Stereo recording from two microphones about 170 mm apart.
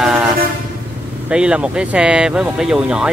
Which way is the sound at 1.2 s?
5° right (ahead or behind).